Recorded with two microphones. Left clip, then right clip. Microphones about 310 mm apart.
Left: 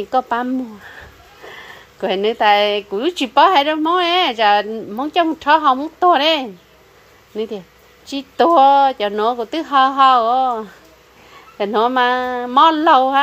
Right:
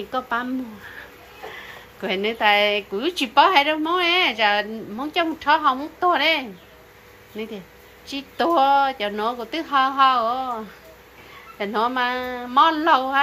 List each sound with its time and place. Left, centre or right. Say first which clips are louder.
0.1 s a woman's voice: left 7 dB; centre
8.1 s a woman's voice: left 7 dB; centre